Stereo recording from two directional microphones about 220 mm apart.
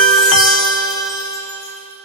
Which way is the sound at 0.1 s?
Centre (ahead or behind).